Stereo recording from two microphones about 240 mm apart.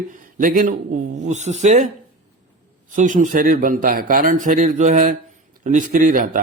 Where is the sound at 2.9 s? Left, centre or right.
Right.